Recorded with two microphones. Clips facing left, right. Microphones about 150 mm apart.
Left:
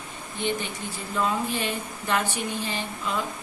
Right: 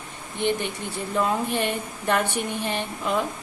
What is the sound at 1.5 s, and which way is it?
Speech, 60° right (ahead or behind).